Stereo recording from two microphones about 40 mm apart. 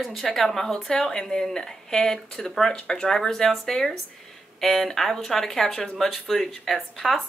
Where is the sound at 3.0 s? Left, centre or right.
Centre.